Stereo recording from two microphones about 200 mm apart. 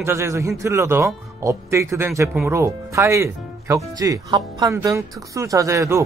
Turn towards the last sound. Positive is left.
turn(degrees=-15)  # may be behind; listen again after turning